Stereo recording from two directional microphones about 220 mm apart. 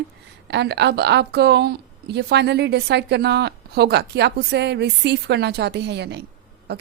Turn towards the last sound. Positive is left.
turn(degrees=-50)  # may be behind; listen again after turning